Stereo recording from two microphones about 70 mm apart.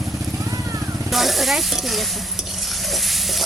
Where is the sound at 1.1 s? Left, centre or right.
Centre.